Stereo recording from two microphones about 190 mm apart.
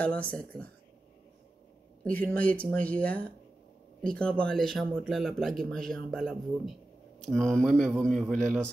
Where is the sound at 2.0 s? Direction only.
10° left (ahead or behind).